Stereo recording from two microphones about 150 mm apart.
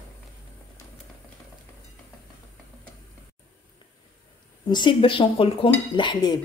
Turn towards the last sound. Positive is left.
turn(degrees=30)  # may be behind; listen again after turning